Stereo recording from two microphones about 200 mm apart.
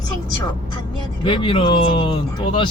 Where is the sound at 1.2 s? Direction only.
25° left (ahead or behind).